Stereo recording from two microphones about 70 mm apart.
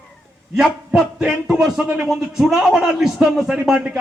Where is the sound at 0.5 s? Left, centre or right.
Centre.